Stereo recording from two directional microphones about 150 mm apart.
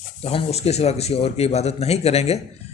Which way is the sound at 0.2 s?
40° left (ahead or behind).